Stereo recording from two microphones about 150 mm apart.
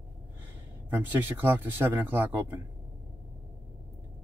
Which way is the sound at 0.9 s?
15° right (ahead or behind).